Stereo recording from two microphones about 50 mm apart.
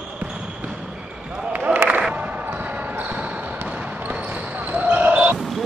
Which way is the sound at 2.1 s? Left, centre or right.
Right.